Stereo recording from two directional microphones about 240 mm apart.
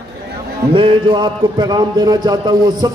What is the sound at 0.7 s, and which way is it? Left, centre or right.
Speech, right.